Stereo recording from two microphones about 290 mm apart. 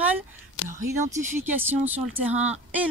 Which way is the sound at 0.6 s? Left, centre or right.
Left.